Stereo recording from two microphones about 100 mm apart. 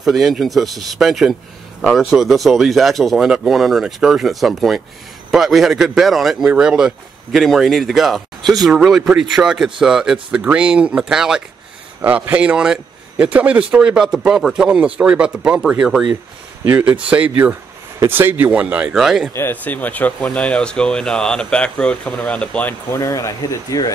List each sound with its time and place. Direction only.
0.0 s speech: centre (ahead or behind)
19.3 s speech: 20° left (ahead or behind)
22.9 s speech: 35° left (ahead or behind)